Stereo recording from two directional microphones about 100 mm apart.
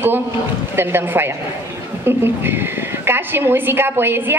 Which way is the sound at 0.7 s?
20° right (ahead or behind).